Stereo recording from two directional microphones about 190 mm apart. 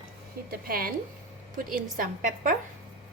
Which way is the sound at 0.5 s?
50° right (ahead or behind).